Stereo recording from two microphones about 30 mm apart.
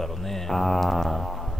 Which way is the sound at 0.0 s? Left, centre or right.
Centre.